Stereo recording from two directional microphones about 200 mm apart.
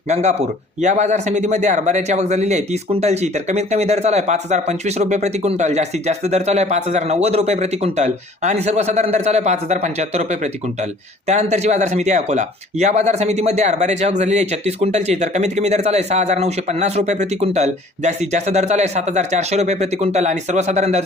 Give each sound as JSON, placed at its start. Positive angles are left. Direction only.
{"t": 0.1, "sound": "speech", "side_deg": -35}